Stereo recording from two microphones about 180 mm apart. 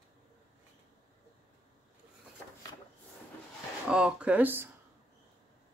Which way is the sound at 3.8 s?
5° right (ahead or behind).